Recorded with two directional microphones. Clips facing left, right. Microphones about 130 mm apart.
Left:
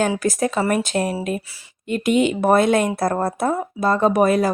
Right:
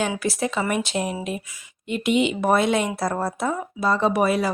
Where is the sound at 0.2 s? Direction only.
45° left (ahead or behind).